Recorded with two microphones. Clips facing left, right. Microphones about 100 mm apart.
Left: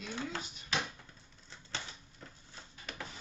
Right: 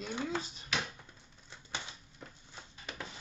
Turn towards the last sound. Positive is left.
turn(degrees=-20)  # may be behind; listen again after turning